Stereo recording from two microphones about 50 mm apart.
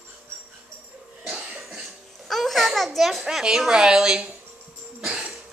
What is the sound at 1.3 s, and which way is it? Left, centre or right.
Cough, right.